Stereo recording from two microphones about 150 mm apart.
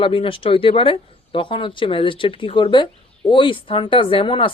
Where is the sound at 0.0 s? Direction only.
35° left (ahead or behind).